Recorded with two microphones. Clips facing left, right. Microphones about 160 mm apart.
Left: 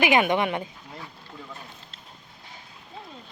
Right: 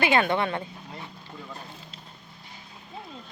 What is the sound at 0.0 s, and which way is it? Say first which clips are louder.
Speech: left 2 dB; 15° left (ahead or behind).